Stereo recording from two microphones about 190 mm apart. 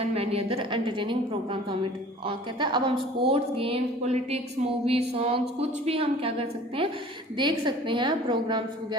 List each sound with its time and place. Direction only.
0.0 s a woman's voice: 30° right (ahead or behind)